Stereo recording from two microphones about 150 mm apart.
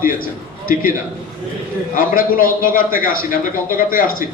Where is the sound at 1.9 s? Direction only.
70° left (ahead or behind).